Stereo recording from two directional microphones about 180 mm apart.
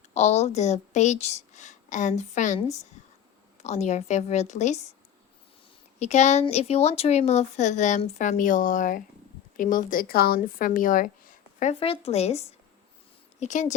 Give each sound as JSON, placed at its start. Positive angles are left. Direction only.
{"t": 0.1, "sound": "speech", "side_deg": 40}
{"t": 6.0, "sound": "speech", "side_deg": 40}
{"t": 11.7, "sound": "speech", "side_deg": 30}